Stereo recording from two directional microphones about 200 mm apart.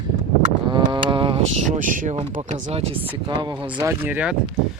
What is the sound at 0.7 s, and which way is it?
Speech, 25° right (ahead or behind).